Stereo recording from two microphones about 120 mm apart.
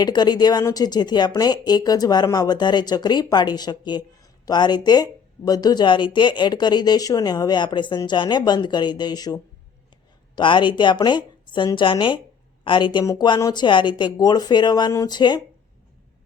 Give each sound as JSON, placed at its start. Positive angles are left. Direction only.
{"t": 0.0, "sound": "speech", "side_deg": 35}